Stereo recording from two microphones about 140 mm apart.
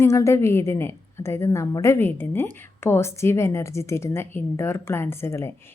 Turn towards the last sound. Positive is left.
turn(degrees=20)  # may be behind; listen again after turning